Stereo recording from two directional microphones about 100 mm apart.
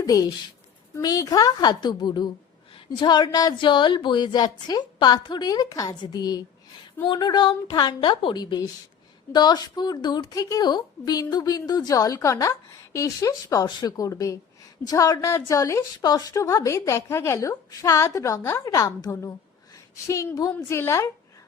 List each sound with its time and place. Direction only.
0.0 s a woman's voice: 40° left (ahead or behind)
7.0 s a woman's voice: 50° left (ahead or behind); by 21.1 s 25° left (ahead or behind)